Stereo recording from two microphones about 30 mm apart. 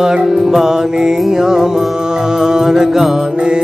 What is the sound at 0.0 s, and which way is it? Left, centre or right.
Music, centre.